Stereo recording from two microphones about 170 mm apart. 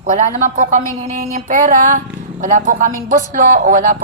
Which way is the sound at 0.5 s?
50° right (ahead or behind).